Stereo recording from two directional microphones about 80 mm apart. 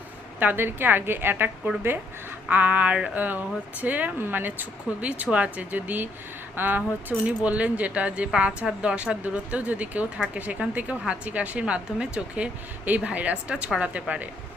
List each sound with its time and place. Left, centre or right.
0.3 s speech: right
2.5 s speech: centre